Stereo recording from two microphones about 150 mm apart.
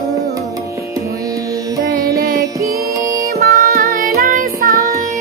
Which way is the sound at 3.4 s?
75° right (ahead or behind).